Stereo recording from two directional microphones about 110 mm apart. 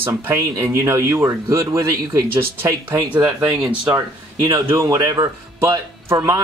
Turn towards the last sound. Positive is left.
turn(degrees=-25)  # may be behind; listen again after turning